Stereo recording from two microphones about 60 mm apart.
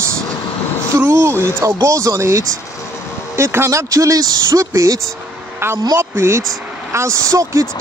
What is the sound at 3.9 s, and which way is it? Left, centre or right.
Speech, right.